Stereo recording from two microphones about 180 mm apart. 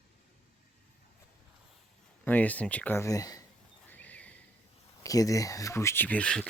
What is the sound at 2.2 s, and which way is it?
Speech, 10° left (ahead or behind).